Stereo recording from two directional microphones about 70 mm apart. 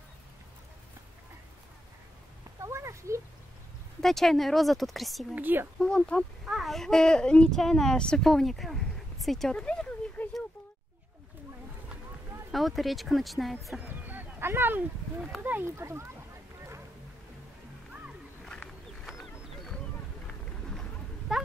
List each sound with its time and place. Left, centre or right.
2.6 s a child's voice: right
4.0 s speech: centre
5.3 s speech: right
5.8 s speech: centre
6.5 s speech: centre
9.5 s a sound: centre
12.4 s speech: centre
13.7 s speech: right
15.6 s speech: right
19.0 s a sound: centre
20.2 s vehicle: centre
21.3 s a sound: centre